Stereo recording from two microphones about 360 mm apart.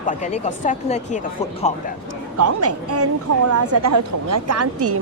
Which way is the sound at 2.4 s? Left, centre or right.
Right.